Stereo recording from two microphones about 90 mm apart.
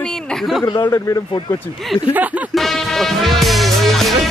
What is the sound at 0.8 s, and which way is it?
Speech, 30° left (ahead or behind).